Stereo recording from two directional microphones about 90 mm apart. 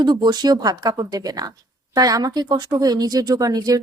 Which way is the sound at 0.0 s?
50° right (ahead or behind).